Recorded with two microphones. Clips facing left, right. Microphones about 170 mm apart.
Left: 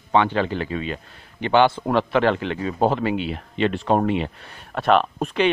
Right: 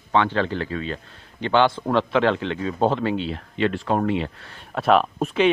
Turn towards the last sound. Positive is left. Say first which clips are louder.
# even
turn(degrees=0)  # may be behind; listen again after turning